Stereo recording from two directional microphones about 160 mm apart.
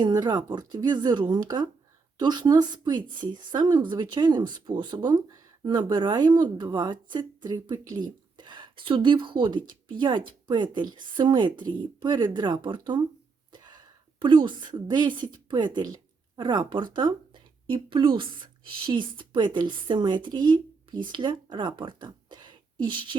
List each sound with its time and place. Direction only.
0.0 s a woman's voice: 25° right (ahead or behind)
13.5 s a sound: 30° right (ahead or behind)
15.3 s a woman's voice: 25° right (ahead or behind)